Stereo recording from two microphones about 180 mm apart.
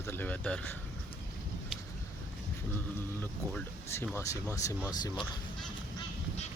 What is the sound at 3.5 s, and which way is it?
Speech, 10° left (ahead or behind).